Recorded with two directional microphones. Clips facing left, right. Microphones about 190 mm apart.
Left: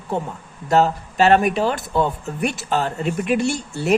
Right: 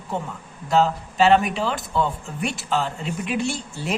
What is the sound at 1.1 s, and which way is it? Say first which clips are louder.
Speech: left 2 dB; 60° left (ahead or behind).